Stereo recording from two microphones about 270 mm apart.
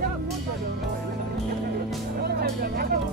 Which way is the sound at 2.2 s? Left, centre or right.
Right.